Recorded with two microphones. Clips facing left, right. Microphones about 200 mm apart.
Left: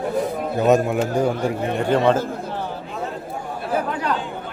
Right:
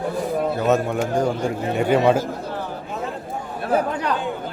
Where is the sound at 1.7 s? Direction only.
10° right (ahead or behind).